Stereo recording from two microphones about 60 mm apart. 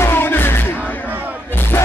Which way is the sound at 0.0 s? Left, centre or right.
Left.